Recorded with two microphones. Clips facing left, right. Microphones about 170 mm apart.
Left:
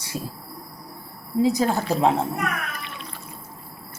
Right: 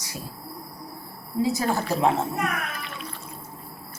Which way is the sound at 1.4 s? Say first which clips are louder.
Left 4 dB; 15° left (ahead or behind).